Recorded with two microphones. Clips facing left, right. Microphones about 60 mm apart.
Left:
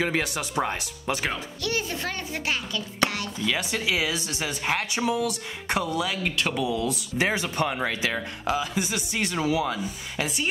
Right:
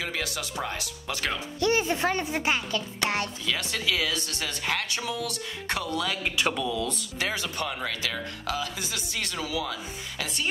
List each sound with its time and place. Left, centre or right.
0.0 s speech: left
1.6 s a child's voice: right
3.4 s speech: centre
7.2 s speech: left